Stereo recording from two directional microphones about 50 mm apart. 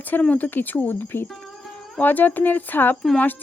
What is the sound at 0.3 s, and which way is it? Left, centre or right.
Speech, left.